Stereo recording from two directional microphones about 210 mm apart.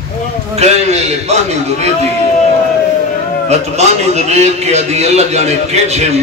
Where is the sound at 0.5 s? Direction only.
30° right (ahead or behind).